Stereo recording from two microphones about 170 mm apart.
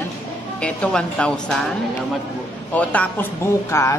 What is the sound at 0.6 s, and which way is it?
Speech, 5° left (ahead or behind).